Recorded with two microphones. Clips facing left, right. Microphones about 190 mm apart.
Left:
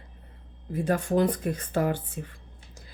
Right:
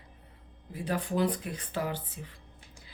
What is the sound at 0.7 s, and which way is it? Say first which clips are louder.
Speech: left 7 dB; 45° left (ahead or behind).